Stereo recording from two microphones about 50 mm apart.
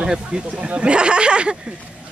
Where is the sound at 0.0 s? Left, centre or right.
Centre.